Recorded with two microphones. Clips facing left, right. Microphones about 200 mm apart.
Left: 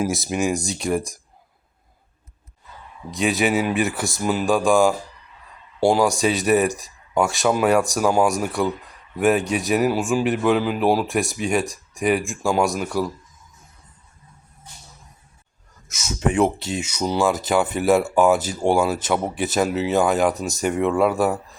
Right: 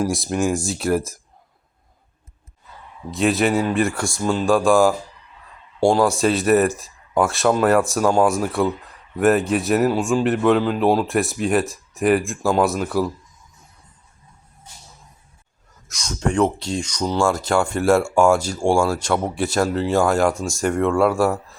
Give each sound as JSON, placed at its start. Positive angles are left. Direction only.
{"t": 0.0, "sound": "a man's voice", "side_deg": 5}
{"t": 3.1, "sound": "a man's voice", "side_deg": 0}
{"t": 15.9, "sound": "a man's voice", "side_deg": 5}
{"t": 20.3, "sound": "speech", "side_deg": 20}
{"t": 20.6, "sound": "a man's voice", "side_deg": 5}